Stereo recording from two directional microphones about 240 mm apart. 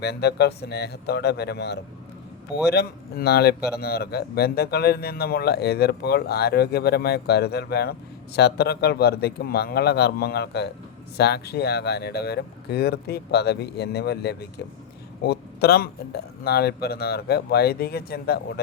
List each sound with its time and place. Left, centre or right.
0.0 s speech: left